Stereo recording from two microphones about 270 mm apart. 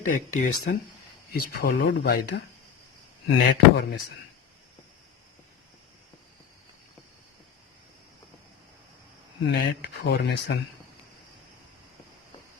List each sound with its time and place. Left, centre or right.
0.0 s speech: left
3.2 s speech: left
9.5 s speech: left